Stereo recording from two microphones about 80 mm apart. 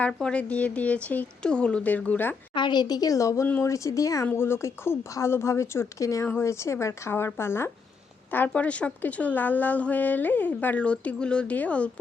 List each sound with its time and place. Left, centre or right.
0.1 s speech: centre
2.6 s speech: left
4.3 s speech: left
8.3 s a woman's voice: centre